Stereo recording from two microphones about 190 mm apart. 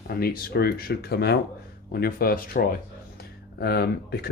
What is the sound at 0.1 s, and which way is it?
Speech, 55° left (ahead or behind).